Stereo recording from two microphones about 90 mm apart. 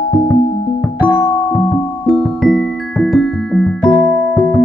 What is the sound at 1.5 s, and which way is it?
Music, 20° left (ahead or behind).